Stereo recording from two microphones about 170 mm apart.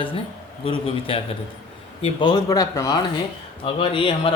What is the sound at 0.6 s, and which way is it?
Speech, 30° left (ahead or behind).